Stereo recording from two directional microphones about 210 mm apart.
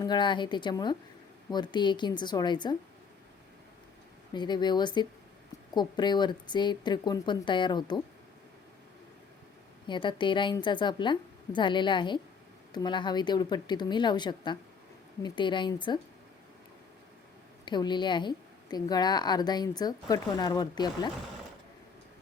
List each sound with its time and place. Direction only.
0.0 s a woman's voice: 20° left (ahead or behind)
4.4 s a woman's voice: 20° left (ahead or behind)
9.8 s a woman's voice: 20° left (ahead or behind)
17.7 s a woman's voice: 20° left (ahead or behind)